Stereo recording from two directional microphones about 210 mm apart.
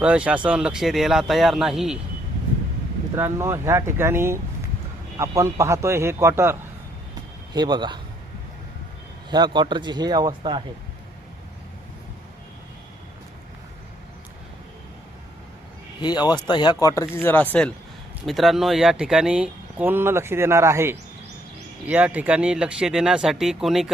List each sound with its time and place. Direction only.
0.0 s speech: 5° right (ahead or behind)
3.2 s speech: 15° right (ahead or behind)
9.3 s speech: 20° right (ahead or behind)
16.0 s speech: 20° left (ahead or behind); by 23.9 s centre (ahead or behind)